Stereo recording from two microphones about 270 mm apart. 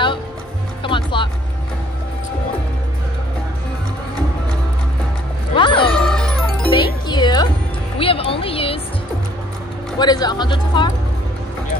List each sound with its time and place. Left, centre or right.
0.8 s music: centre
5.5 s music: centre
5.9 s music: centre
6.7 s music: centre
9.9 s speech: centre